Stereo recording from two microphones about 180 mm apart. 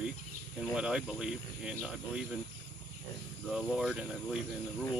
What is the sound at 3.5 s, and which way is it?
Speech, 5° right (ahead or behind).